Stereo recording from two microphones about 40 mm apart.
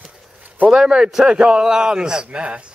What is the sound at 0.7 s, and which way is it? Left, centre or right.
Speech, centre.